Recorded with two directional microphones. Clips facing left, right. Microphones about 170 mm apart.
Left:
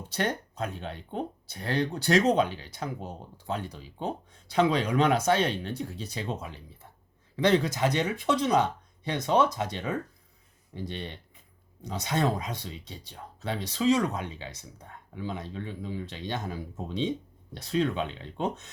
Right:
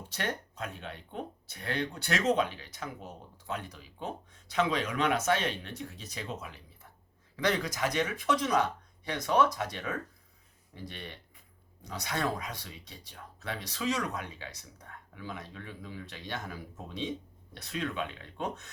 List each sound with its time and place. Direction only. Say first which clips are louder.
0.1 s speech: left 6 dB; 40° left (ahead or behind)